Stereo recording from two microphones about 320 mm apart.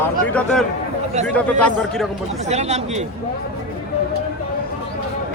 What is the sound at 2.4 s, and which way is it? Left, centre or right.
Speech, right.